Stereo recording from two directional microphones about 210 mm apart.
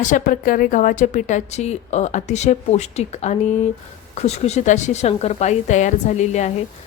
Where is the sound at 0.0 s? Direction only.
40° left (ahead or behind).